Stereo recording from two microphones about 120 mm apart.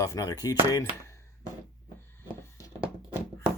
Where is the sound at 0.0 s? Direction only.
30° left (ahead or behind).